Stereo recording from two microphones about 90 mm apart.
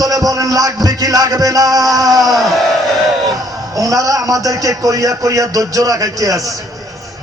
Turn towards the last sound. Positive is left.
turn(degrees=-40)  # may be behind; listen again after turning